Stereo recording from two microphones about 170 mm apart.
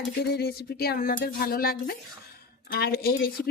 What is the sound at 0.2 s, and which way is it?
Speech, 70° left (ahead or behind).